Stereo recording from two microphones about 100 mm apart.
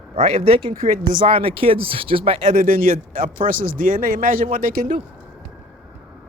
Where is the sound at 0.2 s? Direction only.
85° right.